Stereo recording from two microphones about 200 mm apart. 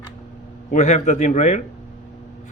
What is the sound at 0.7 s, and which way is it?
Speech, 35° left (ahead or behind).